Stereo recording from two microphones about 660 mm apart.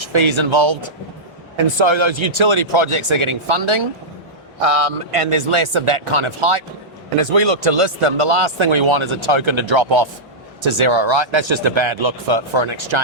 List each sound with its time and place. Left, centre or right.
0.0 s speech: right